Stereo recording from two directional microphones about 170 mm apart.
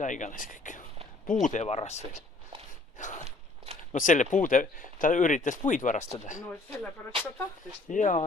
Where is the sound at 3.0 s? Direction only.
45° left (ahead or behind).